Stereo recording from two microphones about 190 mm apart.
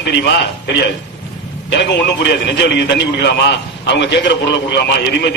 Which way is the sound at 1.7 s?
65° left (ahead or behind).